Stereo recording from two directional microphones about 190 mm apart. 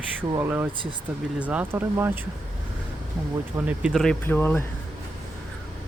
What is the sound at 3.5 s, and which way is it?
Speech, 10° right (ahead or behind).